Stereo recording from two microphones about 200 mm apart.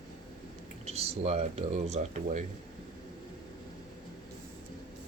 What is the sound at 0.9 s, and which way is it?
Speech, 30° right (ahead or behind).